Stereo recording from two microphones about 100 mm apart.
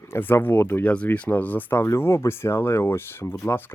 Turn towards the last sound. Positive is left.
turn(degrees=25)  # may be behind; listen again after turning